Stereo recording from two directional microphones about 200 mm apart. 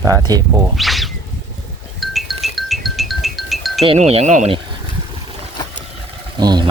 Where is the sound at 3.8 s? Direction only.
30° right (ahead or behind).